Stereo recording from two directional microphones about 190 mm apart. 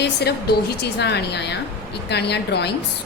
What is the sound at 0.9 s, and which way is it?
A woman's voice, 65° left (ahead or behind).